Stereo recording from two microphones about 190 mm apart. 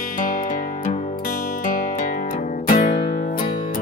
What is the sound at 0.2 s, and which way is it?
Music, 50° left (ahead or behind).